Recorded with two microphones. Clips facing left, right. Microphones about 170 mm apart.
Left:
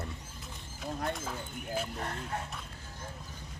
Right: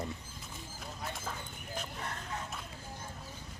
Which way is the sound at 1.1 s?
Centre (ahead or behind).